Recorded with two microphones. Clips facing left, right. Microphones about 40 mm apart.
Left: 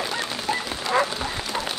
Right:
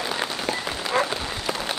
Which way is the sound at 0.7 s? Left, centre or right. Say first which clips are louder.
Left 1 dB; centre.